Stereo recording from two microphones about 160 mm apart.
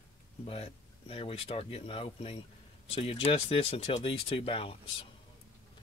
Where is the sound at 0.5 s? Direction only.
35° left (ahead or behind).